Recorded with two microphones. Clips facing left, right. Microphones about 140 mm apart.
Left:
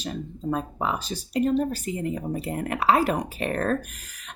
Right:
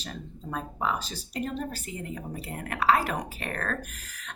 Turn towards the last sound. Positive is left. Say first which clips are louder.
# left 8 dB
turn(degrees=25)  # may be behind; listen again after turning